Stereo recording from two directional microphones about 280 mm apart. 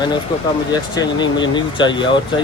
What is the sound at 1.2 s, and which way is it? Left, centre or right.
Speech, centre.